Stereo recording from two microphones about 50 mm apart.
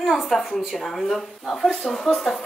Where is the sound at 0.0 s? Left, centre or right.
Centre.